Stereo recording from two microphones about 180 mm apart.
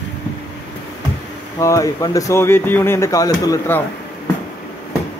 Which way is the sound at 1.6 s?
20° left (ahead or behind).